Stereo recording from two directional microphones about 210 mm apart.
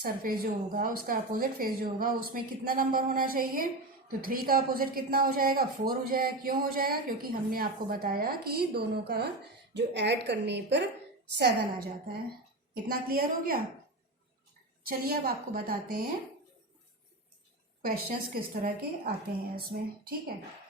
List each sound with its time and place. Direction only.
0.0 s a woman's voice: 45° right (ahead or behind)
14.8 s a woman's voice: 45° right (ahead or behind)
17.8 s a woman's voice: 45° right (ahead or behind)